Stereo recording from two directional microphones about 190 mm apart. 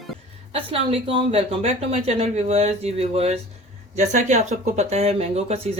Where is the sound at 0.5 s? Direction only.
30° right (ahead or behind).